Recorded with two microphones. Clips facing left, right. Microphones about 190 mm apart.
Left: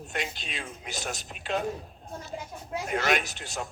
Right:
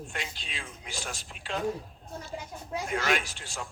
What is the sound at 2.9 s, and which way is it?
Speech, 20° left (ahead or behind).